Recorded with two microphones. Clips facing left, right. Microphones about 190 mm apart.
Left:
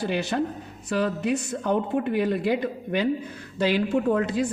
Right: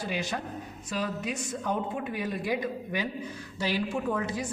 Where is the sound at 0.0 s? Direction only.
65° left (ahead or behind).